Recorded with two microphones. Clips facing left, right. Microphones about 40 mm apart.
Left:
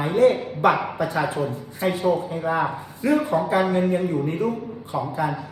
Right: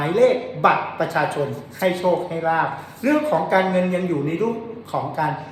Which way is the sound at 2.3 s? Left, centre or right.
Right.